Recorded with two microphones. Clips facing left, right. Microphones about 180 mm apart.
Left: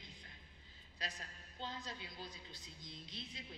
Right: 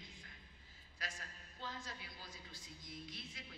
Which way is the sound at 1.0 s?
20° left (ahead or behind).